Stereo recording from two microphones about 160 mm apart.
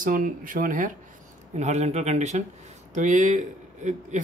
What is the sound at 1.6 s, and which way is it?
A man's voice, 45° right (ahead or behind).